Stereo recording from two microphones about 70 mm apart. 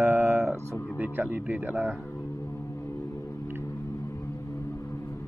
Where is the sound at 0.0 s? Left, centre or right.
Right.